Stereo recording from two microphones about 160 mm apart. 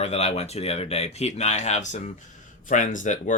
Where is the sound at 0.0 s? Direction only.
40° left (ahead or behind).